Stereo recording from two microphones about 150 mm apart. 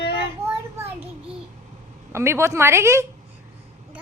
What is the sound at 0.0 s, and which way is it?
Child singing, 90° left.